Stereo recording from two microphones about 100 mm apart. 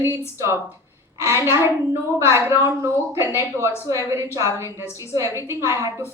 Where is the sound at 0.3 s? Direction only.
30° right (ahead or behind).